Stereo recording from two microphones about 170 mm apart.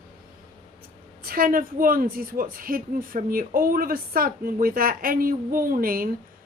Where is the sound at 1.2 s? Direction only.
60° right (ahead or behind).